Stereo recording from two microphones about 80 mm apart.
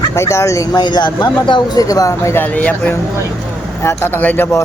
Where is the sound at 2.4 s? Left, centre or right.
Centre.